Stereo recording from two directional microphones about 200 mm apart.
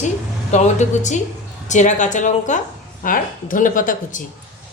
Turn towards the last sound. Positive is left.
turn(degrees=40)  # may be behind; listen again after turning